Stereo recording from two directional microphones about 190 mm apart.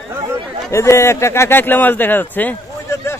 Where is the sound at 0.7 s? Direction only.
15° left (ahead or behind).